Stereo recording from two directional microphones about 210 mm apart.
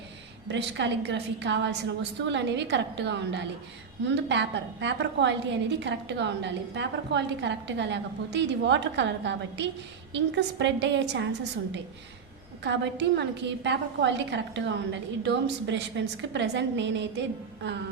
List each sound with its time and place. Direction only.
0.4 s a woman's voice: 60° right (ahead or behind)